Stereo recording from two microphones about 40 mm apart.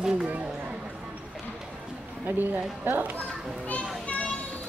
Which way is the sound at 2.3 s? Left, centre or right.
Right.